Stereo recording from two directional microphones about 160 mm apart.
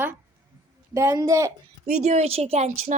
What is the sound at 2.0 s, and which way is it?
A woman's voice, 45° right (ahead or behind).